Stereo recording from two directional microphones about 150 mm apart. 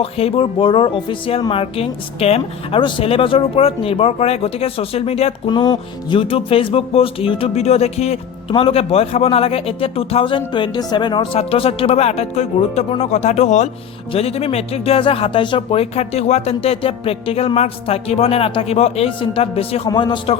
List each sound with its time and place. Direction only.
0.0 s music: 40° left (ahead or behind)
5.5 s music: 30° left (ahead or behind); by 12.8 s 50° left (ahead or behind)
12.9 s speech: 50° left (ahead or behind)
14.1 s music: 40° left (ahead or behind)